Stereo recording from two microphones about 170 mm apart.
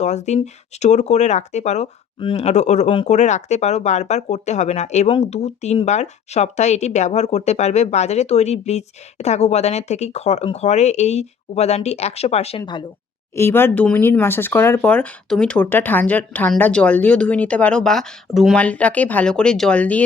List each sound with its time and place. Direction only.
0.0 s speech: 40° left (ahead or behind)
13.3 s speech: 15° left (ahead or behind)